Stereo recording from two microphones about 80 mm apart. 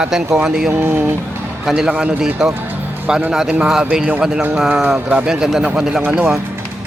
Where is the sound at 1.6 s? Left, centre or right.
Centre.